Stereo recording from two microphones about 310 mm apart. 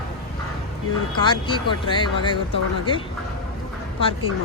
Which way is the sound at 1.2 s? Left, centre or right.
Centre.